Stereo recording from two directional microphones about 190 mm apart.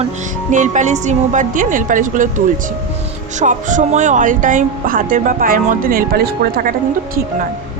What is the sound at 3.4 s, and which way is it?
Speech, 40° right (ahead or behind).